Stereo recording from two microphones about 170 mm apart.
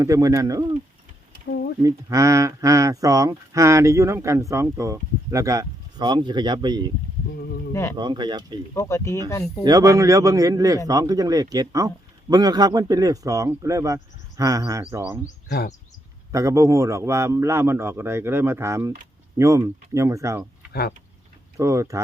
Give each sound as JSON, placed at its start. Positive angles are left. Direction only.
{"t": 0.0, "sound": "speech", "side_deg": -20}
{"t": 1.5, "sound": "a sound", "side_deg": 75}
{"t": 1.8, "sound": "speech", "side_deg": -20}
{"t": 7.3, "sound": "speech", "side_deg": 65}
{"t": 7.7, "sound": "speech", "side_deg": 15}
{"t": 7.9, "sound": "speech", "side_deg": -25}
{"t": 8.7, "sound": "speech", "side_deg": 15}
{"t": 9.6, "sound": "speech", "side_deg": -20}
{"t": 15.4, "sound": "speech", "side_deg": 70}
{"t": 16.3, "sound": "a man's voice", "side_deg": -20}
{"t": 21.6, "sound": "a man's voice", "side_deg": -20}